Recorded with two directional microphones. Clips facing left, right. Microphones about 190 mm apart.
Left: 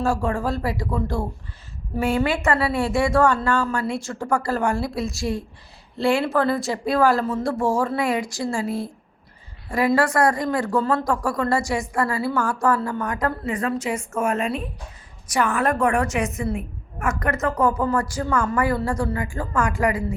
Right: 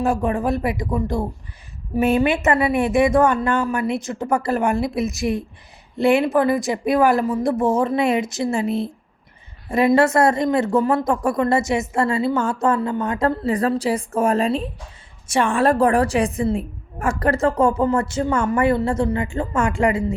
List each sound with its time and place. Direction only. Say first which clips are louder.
0.0 s speech: right 3 dB; 20° right (ahead or behind)